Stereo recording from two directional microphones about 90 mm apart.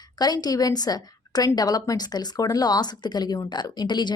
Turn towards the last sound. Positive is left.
turn(degrees=55)  # may be behind; listen again after turning